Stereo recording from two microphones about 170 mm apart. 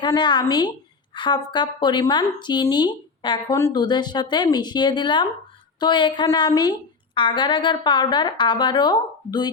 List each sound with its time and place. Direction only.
0.0 s a woman's voice: 25° left (ahead or behind)